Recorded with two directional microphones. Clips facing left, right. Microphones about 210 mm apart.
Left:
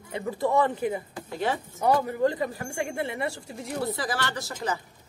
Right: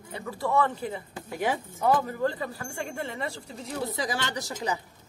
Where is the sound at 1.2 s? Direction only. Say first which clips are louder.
Even; 10° right (ahead or behind).